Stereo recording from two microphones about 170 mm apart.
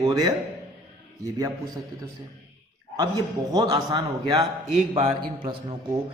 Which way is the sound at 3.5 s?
25° right (ahead or behind).